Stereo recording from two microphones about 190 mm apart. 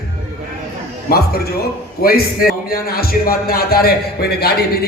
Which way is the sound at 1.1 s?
55° left (ahead or behind).